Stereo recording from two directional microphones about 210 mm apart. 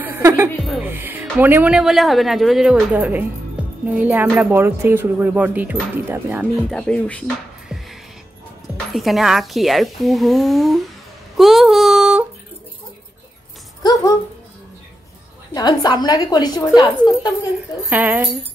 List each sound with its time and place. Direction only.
0.0 s music: 10° right (ahead or behind)
0.7 s speech: 5° right (ahead or behind)
6.7 s speech: 5° left (ahead or behind)
11.3 s a sound: centre (ahead or behind)
15.5 s a woman's voice: 20° left (ahead or behind)
17.8 s speech: 10° right (ahead or behind)